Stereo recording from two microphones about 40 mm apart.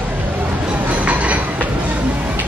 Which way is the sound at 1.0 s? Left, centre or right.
Right.